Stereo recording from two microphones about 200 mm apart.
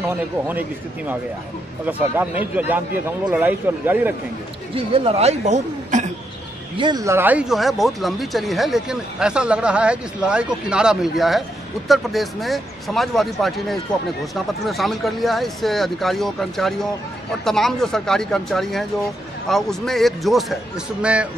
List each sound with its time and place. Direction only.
0.5 s a man's voice: 10° right (ahead or behind)
4.7 s speech: 30° right (ahead or behind)
6.8 s speech: 20° right (ahead or behind)